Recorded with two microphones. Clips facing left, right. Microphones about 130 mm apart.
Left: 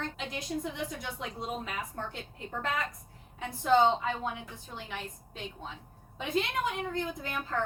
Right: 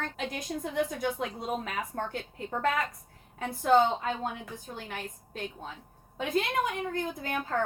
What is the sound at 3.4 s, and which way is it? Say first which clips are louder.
A woman's voice: right 1 dB; 45° right (ahead or behind).